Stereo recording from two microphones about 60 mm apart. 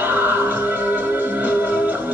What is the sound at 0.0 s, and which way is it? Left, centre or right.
Music, right.